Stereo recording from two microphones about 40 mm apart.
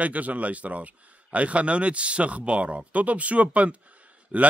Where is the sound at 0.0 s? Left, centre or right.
Right.